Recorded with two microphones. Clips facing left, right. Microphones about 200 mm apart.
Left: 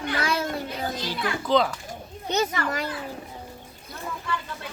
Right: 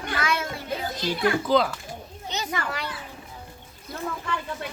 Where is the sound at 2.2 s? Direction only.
50° left (ahead or behind).